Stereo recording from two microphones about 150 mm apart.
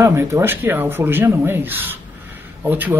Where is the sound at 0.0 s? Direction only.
15° right (ahead or behind).